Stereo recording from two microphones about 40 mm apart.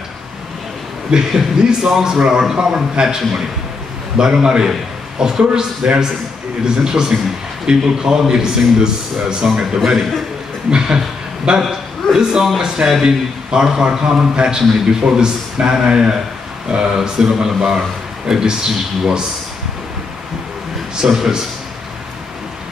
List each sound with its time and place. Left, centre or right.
1.1 s a man's voice: centre
4.2 s a man's voice: centre
10.7 s a man's voice: centre
21.0 s a man's voice: right